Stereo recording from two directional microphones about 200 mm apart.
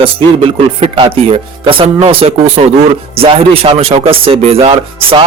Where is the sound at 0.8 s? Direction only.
30° right (ahead or behind).